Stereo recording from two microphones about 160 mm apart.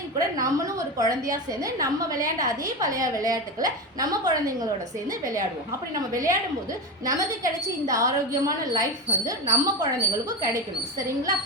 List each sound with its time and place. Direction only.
0.2 s a woman's voice: 20° right (ahead or behind)
6.0 s a woman's voice: 20° right (ahead or behind)